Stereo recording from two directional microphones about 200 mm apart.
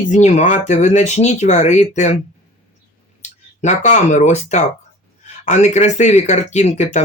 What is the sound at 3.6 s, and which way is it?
A man's voice, 35° left (ahead or behind).